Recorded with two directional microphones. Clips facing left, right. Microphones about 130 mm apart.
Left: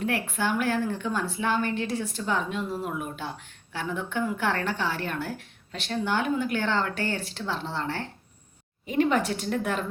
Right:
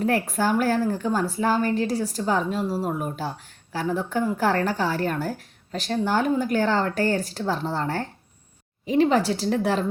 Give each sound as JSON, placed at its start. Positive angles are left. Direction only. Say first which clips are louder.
{"t": 0.0, "sound": "a woman's voice", "louder": "right 5 dB", "side_deg": -40}